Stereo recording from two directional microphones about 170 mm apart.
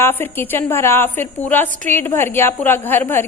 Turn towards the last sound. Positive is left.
turn(degrees=10)  # may be behind; listen again after turning